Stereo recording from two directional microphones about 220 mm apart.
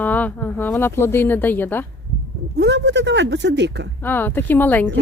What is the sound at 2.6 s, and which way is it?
Speech, 50° right (ahead or behind).